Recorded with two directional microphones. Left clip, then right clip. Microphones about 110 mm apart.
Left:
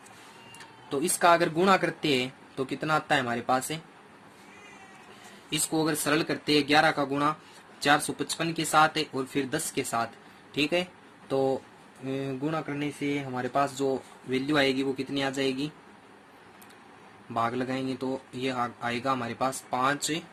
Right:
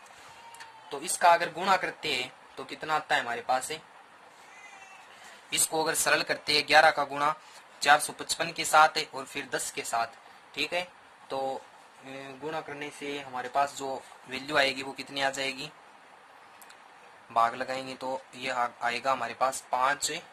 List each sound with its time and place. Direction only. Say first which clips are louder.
0.9 s speech: left 1 dB; centre (ahead or behind)
5.7 s speech: even; 35° right (ahead or behind)
9.7 s speech: left 1 dB; centre (ahead or behind)
14.3 s speech: left 1 dB; 40° right (ahead or behind)
17.5 s speech: left 2 dB; 35° right (ahead or behind)